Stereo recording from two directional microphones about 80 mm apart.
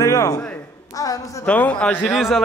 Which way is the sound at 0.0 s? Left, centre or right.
Left.